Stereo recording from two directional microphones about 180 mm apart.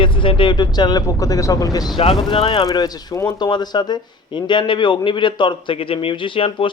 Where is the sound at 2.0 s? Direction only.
30° left (ahead or behind).